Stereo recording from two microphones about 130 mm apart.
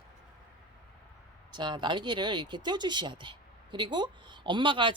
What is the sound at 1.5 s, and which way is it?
Speech, 35° right (ahead or behind).